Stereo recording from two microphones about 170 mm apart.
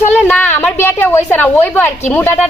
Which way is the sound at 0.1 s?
10° left (ahead or behind).